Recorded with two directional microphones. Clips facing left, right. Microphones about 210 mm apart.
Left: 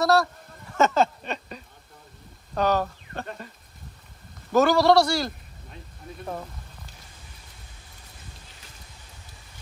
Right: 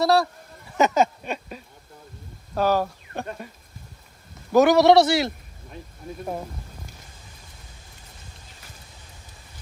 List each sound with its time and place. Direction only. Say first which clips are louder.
0.0 s speech: right 1 dB; 30° right (ahead or behind)
0.7 s a sound: right 1 dB; 15° right (ahead or behind)
2.5 s speech: right 2 dB; 10° right (ahead or behind)
4.5 s a man's voice: right 3 dB; 15° right (ahead or behind)